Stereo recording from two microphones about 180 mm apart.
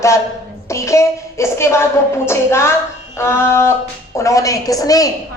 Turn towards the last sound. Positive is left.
turn(degrees=20)  # may be behind; listen again after turning